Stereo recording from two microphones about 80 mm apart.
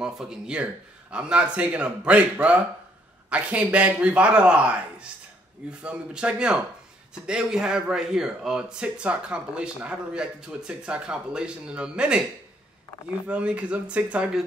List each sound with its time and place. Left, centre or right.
0.0 s speech: centre
13.3 s speech: centre